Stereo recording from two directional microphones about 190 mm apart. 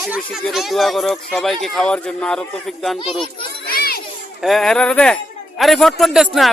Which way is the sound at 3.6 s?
55° left (ahead or behind).